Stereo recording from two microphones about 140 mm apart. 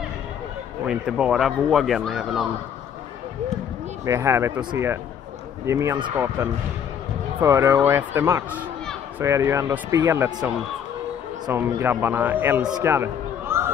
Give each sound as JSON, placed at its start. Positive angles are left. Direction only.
{"t": 0.8, "sound": "speech", "side_deg": -5}
{"t": 4.0, "sound": "speech", "side_deg": -20}
{"t": 5.7, "sound": "speech", "side_deg": -20}
{"t": 11.4, "sound": "speech", "side_deg": -15}
{"t": 12.8, "sound": "a sound", "side_deg": -20}